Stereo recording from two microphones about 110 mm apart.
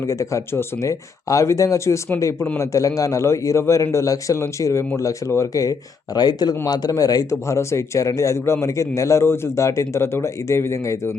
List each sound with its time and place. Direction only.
0.0 s speech: 30° left (ahead or behind)